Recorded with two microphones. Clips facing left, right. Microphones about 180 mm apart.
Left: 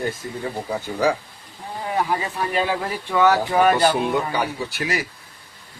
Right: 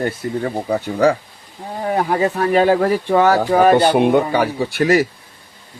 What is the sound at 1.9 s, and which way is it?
Speech, 50° right (ahead or behind).